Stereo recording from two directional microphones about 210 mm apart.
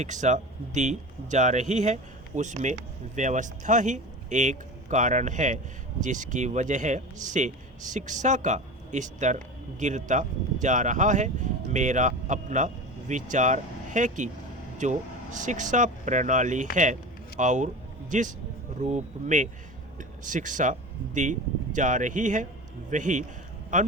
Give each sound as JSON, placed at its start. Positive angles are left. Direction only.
{"t": 0.0, "sound": "a man's voice", "side_deg": -35}